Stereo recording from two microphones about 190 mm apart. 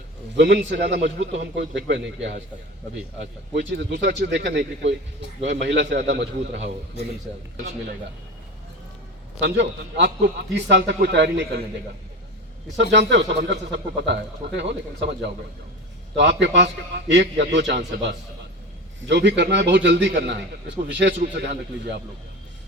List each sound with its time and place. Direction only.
0.3 s a man's voice: 65° right (ahead or behind)
3.5 s a man's voice: 65° right (ahead or behind)
9.4 s a man's voice: 65° right (ahead or behind)
12.7 s a man's voice: 65° right (ahead or behind)
19.0 s a man's voice: 65° right (ahead or behind)